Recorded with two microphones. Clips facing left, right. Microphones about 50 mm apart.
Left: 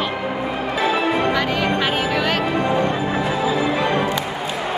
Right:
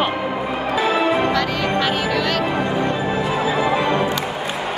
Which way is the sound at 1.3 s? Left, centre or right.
Centre.